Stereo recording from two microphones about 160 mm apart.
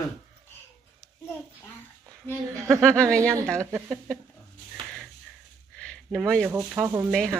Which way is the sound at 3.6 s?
15° right (ahead or behind).